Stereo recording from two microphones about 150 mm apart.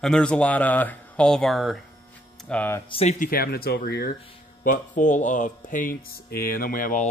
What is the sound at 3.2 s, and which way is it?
Speech, 80° left.